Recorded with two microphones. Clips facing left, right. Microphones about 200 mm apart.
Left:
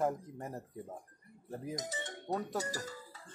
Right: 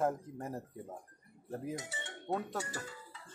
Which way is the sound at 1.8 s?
40° left (ahead or behind).